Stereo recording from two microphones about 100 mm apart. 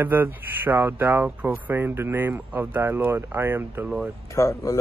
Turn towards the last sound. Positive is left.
turn(degrees=35)  # may be behind; listen again after turning